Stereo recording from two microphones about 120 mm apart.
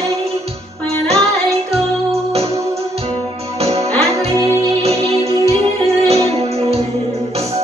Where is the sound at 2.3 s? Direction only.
60° right (ahead or behind).